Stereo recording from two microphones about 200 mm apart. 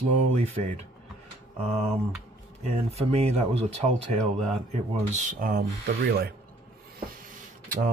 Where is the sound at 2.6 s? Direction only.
30° right (ahead or behind).